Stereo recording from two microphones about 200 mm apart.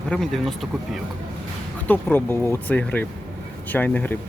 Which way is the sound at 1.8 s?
10° left (ahead or behind).